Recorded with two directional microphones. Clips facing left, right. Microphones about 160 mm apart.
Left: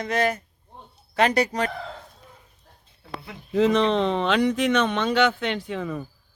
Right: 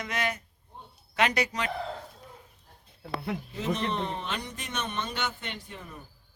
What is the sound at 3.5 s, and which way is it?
Speech, 90° left.